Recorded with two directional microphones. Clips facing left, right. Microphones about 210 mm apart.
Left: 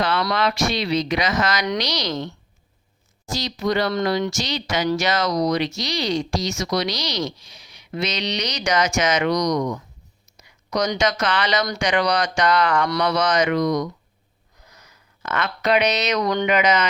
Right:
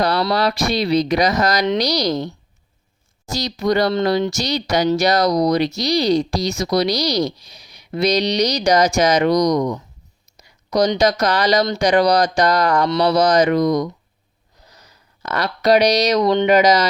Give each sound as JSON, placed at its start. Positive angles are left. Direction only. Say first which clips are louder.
{"t": 0.0, "sound": "speech", "louder": "right 4 dB", "side_deg": -40}